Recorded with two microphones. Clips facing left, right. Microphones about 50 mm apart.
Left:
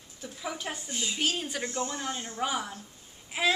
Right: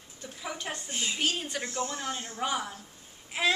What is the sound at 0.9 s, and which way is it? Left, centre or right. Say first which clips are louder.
Speech: right 2 dB; right.